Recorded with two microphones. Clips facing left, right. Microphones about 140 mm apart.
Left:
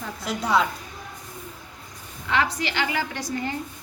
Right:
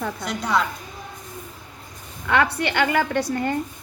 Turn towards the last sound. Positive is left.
turn(degrees=-55)  # may be behind; listen again after turning